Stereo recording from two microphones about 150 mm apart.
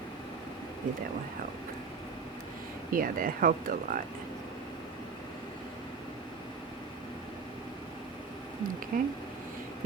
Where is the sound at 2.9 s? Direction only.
70° right (ahead or behind).